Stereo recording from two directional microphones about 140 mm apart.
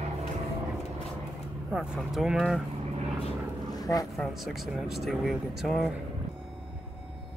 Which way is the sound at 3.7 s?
25° left (ahead or behind).